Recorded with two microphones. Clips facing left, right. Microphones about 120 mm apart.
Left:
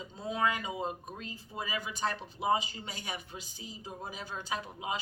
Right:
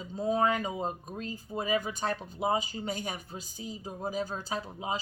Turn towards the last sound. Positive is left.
turn(degrees=-35)  # may be behind; listen again after turning